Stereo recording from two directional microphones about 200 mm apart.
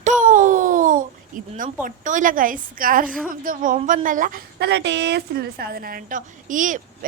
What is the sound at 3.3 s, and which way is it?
A woman's voice, 45° right (ahead or behind).